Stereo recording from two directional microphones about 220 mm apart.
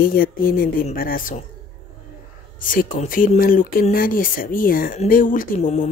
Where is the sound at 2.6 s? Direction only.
40° left (ahead or behind).